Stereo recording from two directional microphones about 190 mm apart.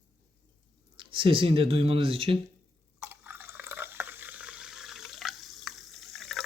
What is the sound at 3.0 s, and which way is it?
Water, 10° right (ahead or behind).